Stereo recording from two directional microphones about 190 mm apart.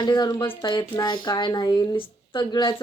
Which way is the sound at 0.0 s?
20° left (ahead or behind).